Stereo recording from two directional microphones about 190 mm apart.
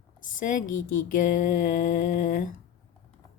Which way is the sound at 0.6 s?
90° left.